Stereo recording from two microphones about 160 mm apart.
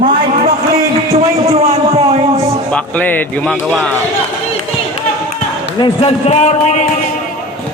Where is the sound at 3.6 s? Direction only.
5° right (ahead or behind).